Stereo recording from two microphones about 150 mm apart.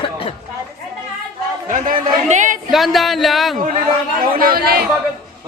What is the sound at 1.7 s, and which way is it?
Speech, 55° right (ahead or behind).